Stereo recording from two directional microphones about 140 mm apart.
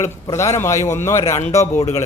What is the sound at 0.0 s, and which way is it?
A man's voice, 20° left (ahead or behind).